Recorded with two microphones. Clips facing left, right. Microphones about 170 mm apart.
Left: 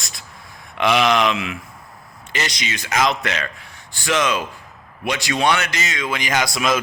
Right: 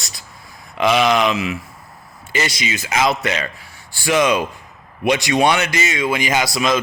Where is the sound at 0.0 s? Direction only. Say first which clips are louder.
Even; centre (ahead or behind).